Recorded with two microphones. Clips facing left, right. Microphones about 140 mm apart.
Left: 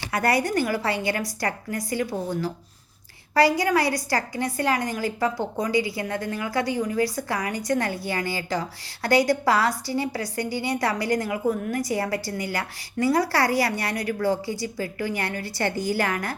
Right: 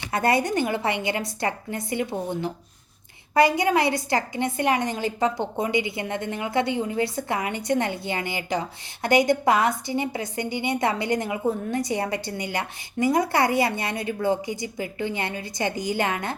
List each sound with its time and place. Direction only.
0.1 s a woman's voice: 25° right (ahead or behind)
3.3 s a woman's voice: 20° right (ahead or behind)